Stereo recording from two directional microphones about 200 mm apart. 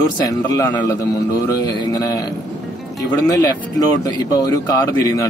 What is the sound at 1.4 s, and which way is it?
Music, 20° left (ahead or behind).